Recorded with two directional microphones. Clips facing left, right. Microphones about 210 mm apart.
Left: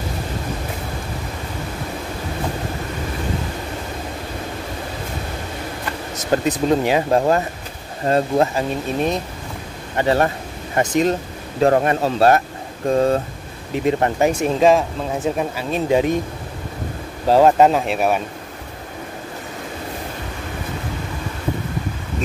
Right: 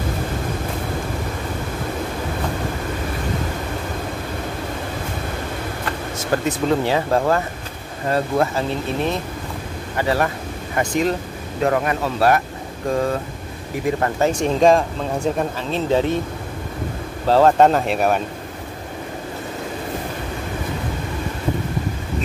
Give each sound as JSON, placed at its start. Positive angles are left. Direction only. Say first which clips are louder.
{"t": 6.3, "sound": "speech", "louder": "left 2 dB", "side_deg": 20}
{"t": 9.9, "sound": "speech", "louder": "left 3 dB", "side_deg": 25}
{"t": 11.6, "sound": "speech", "louder": "left 4 dB", "side_deg": 30}
{"t": 13.8, "sound": "speech", "louder": "left 2 dB", "side_deg": 20}
{"t": 14.3, "sound": "speech", "louder": "right 2 dB", "side_deg": 5}
{"t": 17.3, "sound": "speech", "louder": "left 1 dB", "side_deg": 15}
{"t": 17.6, "sound": "speech", "louder": "even", "side_deg": 0}